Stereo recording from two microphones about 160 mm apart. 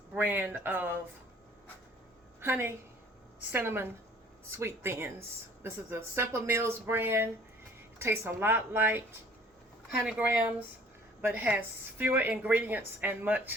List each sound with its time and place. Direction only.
0.1 s a woman's voice: 10° right (ahead or behind)
2.4 s a woman's voice: 15° right (ahead or behind)
10.1 s a woman's voice: 10° right (ahead or behind)